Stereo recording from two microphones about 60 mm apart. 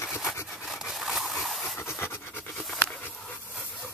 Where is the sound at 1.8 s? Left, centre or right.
Left.